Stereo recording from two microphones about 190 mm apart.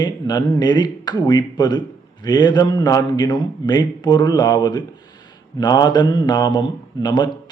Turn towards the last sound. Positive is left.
turn(degrees=20)  # may be behind; listen again after turning